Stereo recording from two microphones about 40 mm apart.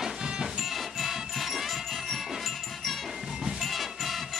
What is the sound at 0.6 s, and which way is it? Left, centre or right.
Music, centre.